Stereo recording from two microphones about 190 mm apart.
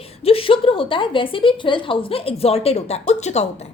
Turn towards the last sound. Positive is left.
turn(degrees=35)  # may be behind; listen again after turning